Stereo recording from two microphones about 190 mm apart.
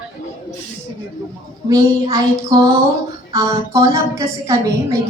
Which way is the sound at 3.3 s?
15° right (ahead or behind).